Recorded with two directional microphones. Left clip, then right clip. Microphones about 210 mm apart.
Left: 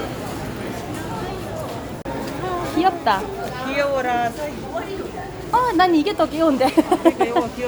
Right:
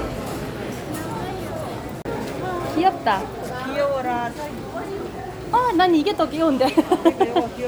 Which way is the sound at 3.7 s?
50° left (ahead or behind).